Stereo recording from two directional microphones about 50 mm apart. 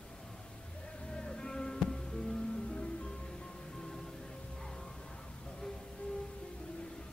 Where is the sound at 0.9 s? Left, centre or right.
Centre.